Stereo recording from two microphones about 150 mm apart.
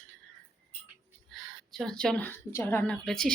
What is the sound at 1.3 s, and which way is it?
A woman's voice, centre (ahead or behind).